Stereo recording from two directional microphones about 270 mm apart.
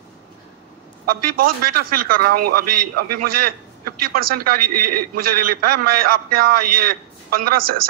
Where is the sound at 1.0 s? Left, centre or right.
Right.